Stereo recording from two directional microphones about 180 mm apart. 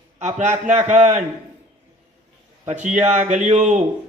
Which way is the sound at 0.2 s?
40° right (ahead or behind).